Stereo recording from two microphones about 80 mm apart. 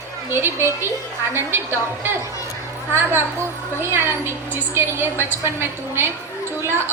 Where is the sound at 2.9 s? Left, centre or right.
Right.